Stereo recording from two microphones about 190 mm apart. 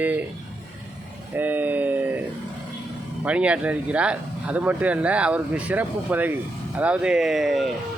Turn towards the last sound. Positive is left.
turn(degrees=0)  # may be behind; listen again after turning